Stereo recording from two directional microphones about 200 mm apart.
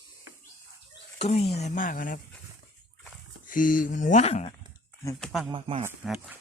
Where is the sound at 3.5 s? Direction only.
40° left (ahead or behind).